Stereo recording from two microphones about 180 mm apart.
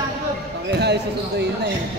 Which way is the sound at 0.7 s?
70° right (ahead or behind).